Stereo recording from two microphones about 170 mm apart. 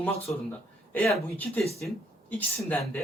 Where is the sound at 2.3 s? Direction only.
10° left (ahead or behind).